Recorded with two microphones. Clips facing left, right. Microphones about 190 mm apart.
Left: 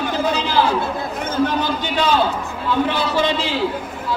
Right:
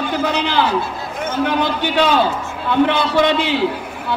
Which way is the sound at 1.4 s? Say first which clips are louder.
Right 3 dB; 65° right (ahead or behind).